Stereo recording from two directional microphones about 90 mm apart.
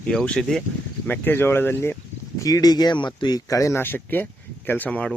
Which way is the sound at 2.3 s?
40° left (ahead or behind).